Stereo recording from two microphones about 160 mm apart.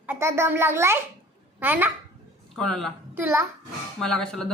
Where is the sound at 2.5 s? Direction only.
5° left (ahead or behind).